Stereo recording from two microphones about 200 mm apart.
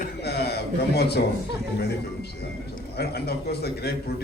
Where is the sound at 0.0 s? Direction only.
55° left (ahead or behind).